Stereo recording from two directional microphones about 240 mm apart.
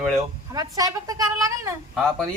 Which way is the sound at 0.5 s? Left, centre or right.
Centre.